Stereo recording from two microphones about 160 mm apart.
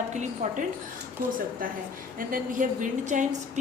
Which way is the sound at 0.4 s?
50° right (ahead or behind).